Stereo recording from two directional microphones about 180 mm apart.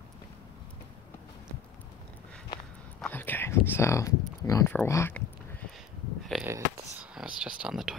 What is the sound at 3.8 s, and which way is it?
Speech, 15° left (ahead or behind).